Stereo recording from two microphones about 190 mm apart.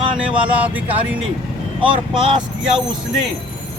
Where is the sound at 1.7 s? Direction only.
25° right (ahead or behind).